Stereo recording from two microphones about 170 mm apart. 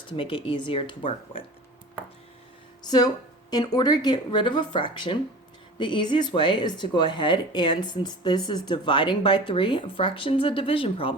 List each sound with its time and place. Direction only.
0.1 s speech: 30° left (ahead or behind)
2.8 s speech: 25° left (ahead or behind)